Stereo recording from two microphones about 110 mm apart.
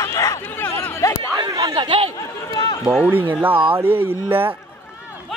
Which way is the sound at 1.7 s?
50° right (ahead or behind).